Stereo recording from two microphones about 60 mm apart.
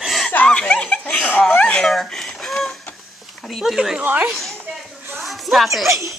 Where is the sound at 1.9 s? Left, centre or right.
Centre.